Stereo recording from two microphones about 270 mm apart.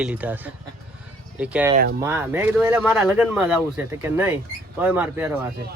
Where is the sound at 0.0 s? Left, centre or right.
Centre.